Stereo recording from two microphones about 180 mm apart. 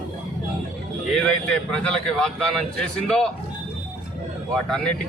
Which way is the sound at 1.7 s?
5° left (ahead or behind).